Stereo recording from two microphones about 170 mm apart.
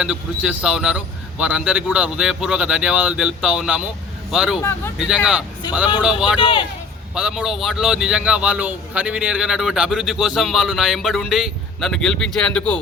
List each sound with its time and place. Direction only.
0.0 s a man's voice: 5° right (ahead or behind)
6.4 s a man's voice: 25° left (ahead or behind)
7.1 s a man's voice: 5° right (ahead or behind)